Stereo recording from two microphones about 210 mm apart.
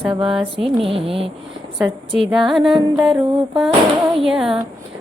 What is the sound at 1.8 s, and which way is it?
Speech, centre (ahead or behind).